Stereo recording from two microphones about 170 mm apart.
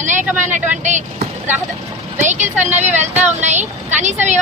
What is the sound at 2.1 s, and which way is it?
Speech, 45° right (ahead or behind).